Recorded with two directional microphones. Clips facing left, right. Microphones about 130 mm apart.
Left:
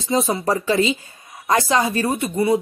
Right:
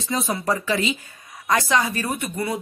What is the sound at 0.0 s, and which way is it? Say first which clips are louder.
A woman's voice: left 5 dB; 30° left (ahead or behind).